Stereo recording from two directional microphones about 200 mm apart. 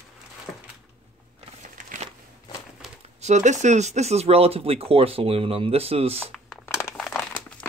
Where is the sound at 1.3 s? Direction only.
40° right (ahead or behind).